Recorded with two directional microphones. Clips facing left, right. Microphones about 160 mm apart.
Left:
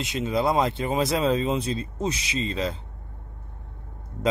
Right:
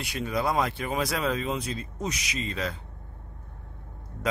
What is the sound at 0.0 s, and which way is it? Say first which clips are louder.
Speech: left 4 dB; 20° left (ahead or behind).